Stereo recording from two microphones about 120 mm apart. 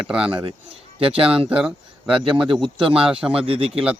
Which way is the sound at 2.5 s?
45° right (ahead or behind).